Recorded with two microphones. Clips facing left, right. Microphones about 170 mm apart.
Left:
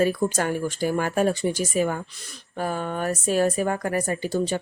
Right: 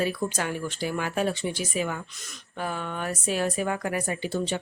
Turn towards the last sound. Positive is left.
turn(degrees=40)  # may be behind; listen again after turning